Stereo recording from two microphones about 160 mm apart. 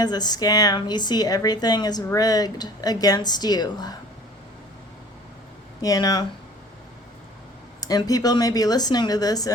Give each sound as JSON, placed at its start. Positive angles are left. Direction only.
{"t": 0.0, "sound": "speech", "side_deg": 25}
{"t": 5.8, "sound": "speech", "side_deg": 20}
{"t": 7.8, "sound": "speech", "side_deg": 25}